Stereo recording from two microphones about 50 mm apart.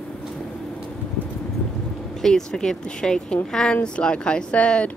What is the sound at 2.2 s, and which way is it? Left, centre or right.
Speech, centre.